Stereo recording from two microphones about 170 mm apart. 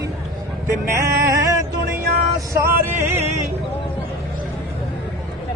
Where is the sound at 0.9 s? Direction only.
20° right (ahead or behind).